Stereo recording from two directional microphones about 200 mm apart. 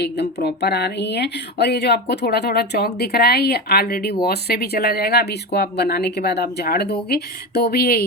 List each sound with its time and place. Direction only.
0.0 s speech: 55° left (ahead or behind)